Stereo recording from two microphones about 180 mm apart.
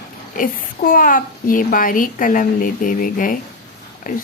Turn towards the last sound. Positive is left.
turn(degrees=50)  # may be behind; listen again after turning